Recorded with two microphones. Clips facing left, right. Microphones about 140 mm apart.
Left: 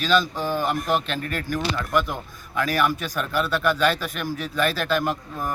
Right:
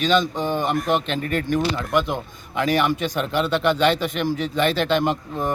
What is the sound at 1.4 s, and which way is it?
A man's voice, 20° right (ahead or behind).